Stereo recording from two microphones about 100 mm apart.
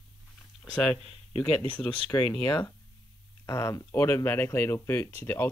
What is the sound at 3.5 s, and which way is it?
Speech, 30° left (ahead or behind).